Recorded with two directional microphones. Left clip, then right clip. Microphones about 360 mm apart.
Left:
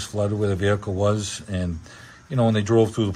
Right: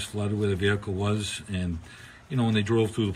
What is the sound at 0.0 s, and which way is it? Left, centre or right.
Speech, left.